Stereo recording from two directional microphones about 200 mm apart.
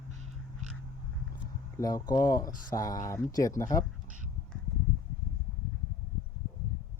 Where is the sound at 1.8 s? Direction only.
20° left (ahead or behind).